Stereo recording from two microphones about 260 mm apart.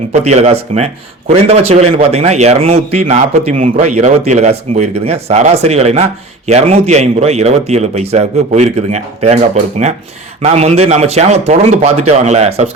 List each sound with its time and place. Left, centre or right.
0.1 s a man's voice: right